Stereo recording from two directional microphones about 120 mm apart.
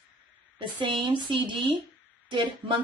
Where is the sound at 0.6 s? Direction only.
40° right (ahead or behind).